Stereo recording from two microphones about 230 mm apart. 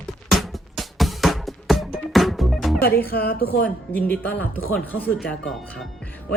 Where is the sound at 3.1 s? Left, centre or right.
Left.